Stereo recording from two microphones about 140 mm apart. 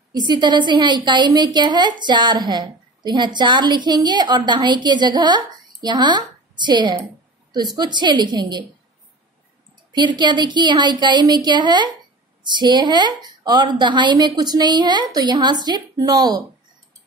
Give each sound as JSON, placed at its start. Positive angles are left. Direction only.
{"t": 0.1, "sound": "a woman's voice", "side_deg": -30}
{"t": 9.9, "sound": "a woman's voice", "side_deg": -35}